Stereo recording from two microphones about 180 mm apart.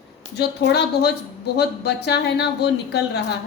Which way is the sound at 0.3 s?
65° left (ahead or behind).